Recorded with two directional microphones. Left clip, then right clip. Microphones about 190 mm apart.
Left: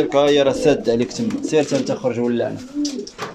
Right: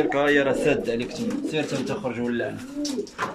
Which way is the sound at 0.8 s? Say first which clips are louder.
Left 7 dB; 25° left (ahead or behind).